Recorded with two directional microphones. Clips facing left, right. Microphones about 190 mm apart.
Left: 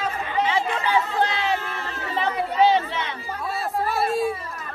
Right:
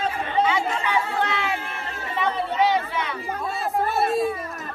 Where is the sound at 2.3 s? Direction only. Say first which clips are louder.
Right 1 dB; 30° right (ahead or behind).